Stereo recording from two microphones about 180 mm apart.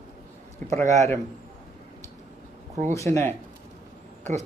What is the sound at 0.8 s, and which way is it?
Speech, 40° right (ahead or behind).